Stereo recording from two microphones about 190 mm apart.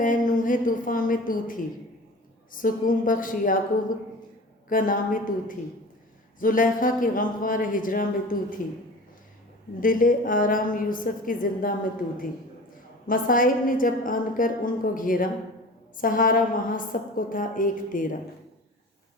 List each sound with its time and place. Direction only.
0.0 s a woman's voice: 45° left (ahead or behind)
9.8 s a woman's voice: 45° left (ahead or behind)
13.1 s a woman's voice: 45° left (ahead or behind)